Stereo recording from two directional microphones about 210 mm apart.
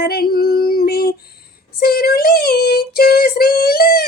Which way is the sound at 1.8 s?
45° left (ahead or behind).